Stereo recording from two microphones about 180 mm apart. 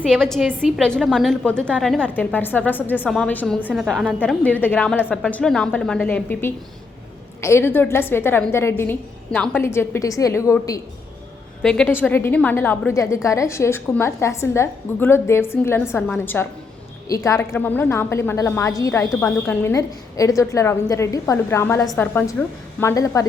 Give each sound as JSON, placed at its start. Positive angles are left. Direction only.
{"t": 0.0, "sound": "a woman's voice", "side_deg": 5}
{"t": 11.6, "sound": "a woman's voice", "side_deg": 5}